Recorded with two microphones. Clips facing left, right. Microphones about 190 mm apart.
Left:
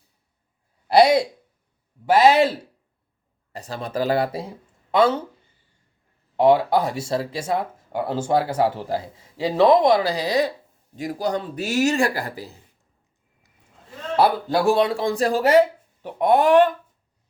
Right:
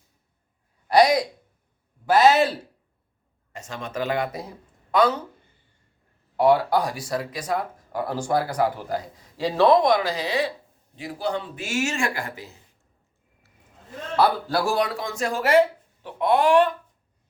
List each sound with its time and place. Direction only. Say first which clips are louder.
0.9 s speech: left 2 dB; 30° left (ahead or behind)
2.1 s speech: left 1 dB; 15° left (ahead or behind)
3.5 s speech: left 4 dB; 35° left (ahead or behind)
6.3 s speech: left 2 dB; 25° left (ahead or behind)
14.2 s speech: left 2 dB; 25° left (ahead or behind)
16.0 s speech: left 3 dB; 45° left (ahead or behind)